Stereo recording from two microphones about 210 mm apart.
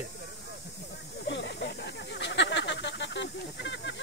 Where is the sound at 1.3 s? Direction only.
55° left (ahead or behind).